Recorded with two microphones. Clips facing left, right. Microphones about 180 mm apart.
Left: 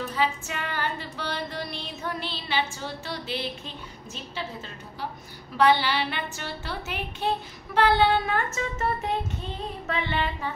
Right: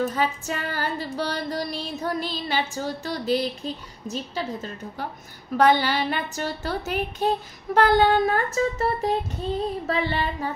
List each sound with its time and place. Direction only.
0.0 s music: 40° right (ahead or behind)
5.6 s music: 45° right (ahead or behind)